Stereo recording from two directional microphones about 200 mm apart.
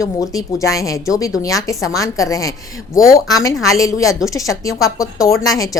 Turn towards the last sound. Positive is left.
turn(degrees=15)  # may be behind; listen again after turning